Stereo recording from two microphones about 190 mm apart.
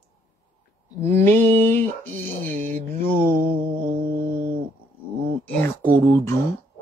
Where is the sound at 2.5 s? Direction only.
45° right (ahead or behind).